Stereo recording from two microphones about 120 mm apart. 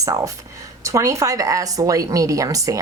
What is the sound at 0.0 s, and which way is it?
Speech, 25° right (ahead or behind).